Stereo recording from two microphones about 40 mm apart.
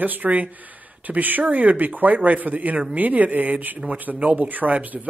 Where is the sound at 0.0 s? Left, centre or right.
Right.